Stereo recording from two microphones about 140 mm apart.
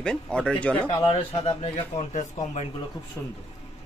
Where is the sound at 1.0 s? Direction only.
45° left (ahead or behind).